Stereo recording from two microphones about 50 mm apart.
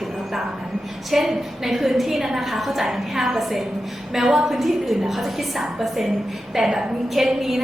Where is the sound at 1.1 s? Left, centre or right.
Centre.